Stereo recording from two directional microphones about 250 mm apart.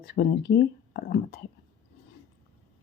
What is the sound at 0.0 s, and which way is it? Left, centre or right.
Speech, left.